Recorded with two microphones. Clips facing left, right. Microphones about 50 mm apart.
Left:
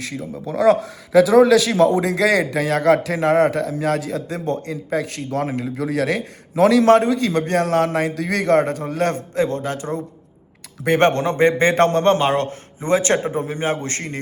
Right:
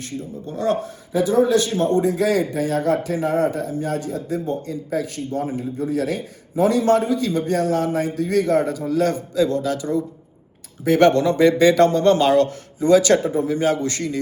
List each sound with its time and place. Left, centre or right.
0.8 s a man's voice: left
7.9 s a man's voice: left